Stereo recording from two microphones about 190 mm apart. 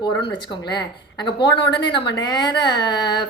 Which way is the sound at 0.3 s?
25° left (ahead or behind).